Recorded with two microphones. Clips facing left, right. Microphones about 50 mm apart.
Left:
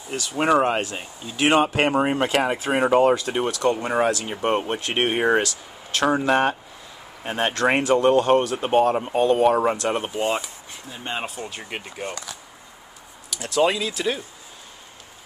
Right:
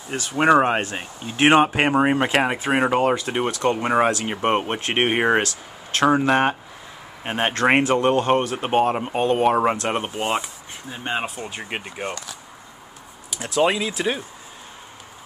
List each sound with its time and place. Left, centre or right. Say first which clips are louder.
0.1 s speech: right 3 dB; right
1.6 s speech: right 2 dB; centre; by 11.0 s right
11.1 s speech: right 3 dB; centre
13.3 s speech: right 1 dB; centre